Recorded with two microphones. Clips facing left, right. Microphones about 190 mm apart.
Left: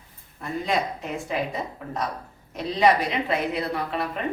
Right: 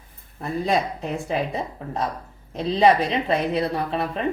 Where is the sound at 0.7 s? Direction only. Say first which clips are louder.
Right 3 dB; 35° right (ahead or behind).